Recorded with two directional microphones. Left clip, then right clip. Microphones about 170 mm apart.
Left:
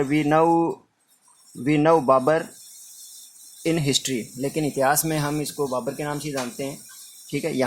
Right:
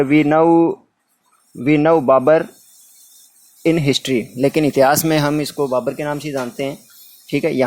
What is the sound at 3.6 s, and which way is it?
Speech, 35° right (ahead or behind).